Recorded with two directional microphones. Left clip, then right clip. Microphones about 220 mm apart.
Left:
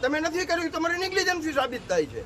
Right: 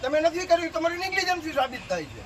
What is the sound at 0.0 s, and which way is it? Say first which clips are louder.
A man's voice: right 2 dB; 15° left (ahead or behind).